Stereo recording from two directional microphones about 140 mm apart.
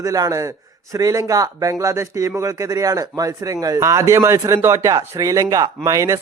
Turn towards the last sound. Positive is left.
turn(degrees=-25)  # may be behind; listen again after turning